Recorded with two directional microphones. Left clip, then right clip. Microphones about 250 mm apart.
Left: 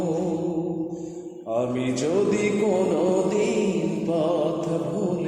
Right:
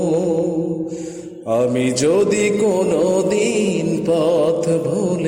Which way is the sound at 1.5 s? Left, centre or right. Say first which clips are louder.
Right 8 dB; right.